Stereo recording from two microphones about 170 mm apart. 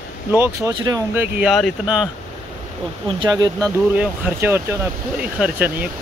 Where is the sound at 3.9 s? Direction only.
10° right (ahead or behind).